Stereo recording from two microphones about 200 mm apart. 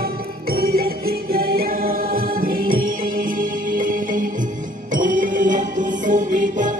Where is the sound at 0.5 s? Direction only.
50° right (ahead or behind).